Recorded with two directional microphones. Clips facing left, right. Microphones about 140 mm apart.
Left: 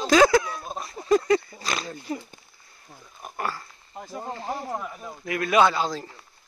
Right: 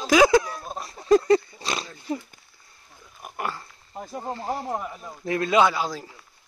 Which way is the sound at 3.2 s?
15° right (ahead or behind).